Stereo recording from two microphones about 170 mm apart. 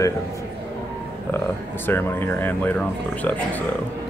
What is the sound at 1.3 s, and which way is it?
Speech, 10° left (ahead or behind).